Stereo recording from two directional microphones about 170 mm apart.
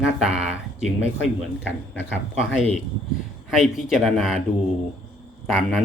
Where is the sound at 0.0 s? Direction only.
5° right (ahead or behind).